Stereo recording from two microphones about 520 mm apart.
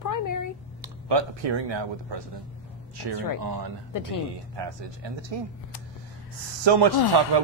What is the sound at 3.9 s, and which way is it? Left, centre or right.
Speech, left.